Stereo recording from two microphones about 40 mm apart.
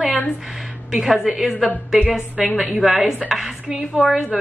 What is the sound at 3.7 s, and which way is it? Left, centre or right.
Speech, right.